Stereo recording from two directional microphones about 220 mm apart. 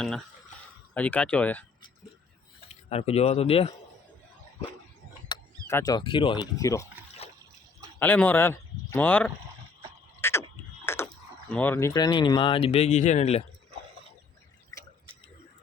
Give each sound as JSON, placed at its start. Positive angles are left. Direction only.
{"t": 0.9, "sound": "speech", "side_deg": 5}
{"t": 2.6, "sound": "speech", "side_deg": 25}
{"t": 5.3, "sound": "speech", "side_deg": 15}
{"t": 7.2, "sound": "trickle", "side_deg": 30}
{"t": 7.9, "sound": "speech", "side_deg": 10}
{"t": 10.2, "sound": "a sound", "side_deg": 10}
{"t": 10.8, "sound": "speech", "side_deg": 10}